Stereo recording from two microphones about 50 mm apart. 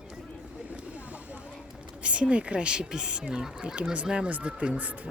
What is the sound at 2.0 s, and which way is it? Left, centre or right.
Speech, right.